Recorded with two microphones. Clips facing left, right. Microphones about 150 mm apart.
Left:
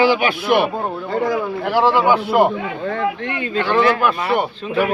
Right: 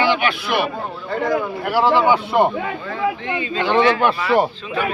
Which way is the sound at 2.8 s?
75° left (ahead or behind).